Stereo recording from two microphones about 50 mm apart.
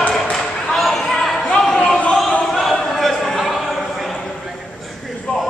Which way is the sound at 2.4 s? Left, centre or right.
Centre.